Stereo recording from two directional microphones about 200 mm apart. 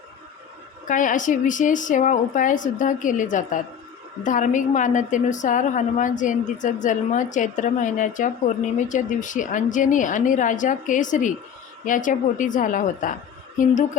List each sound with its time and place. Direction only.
0.9 s a woman's voice: 40° left (ahead or behind)